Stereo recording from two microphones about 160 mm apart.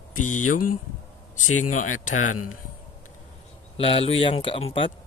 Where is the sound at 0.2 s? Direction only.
55° left (ahead or behind).